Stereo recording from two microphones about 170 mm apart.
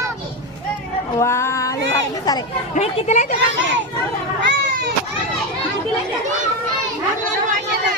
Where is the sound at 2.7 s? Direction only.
45° left (ahead or behind).